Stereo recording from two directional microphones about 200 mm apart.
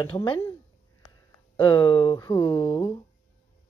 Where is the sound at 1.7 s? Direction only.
20° left (ahead or behind).